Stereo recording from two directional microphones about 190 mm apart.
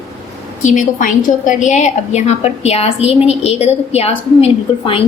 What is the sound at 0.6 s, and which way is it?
A woman's voice, 40° left (ahead or behind).